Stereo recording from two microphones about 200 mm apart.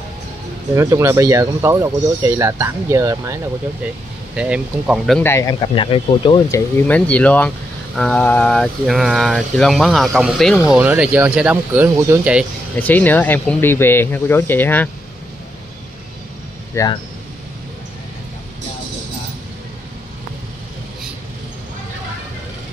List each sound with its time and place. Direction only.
0.7 s speech: 15° right (ahead or behind)
5.2 s speech: 15° left (ahead or behind)
6.5 s speech: 5° left (ahead or behind); by 12.4 s 10° right (ahead or behind)
12.7 s speech: 10° left (ahead or behind)
16.7 s speech: 20° left (ahead or behind)